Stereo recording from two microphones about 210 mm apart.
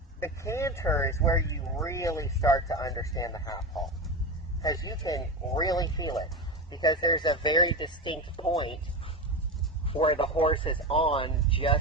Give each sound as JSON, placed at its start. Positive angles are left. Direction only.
{"t": 0.2, "sound": "speech", "side_deg": 15}
{"t": 4.6, "sound": "speech", "side_deg": 15}
{"t": 9.8, "sound": "speech", "side_deg": 25}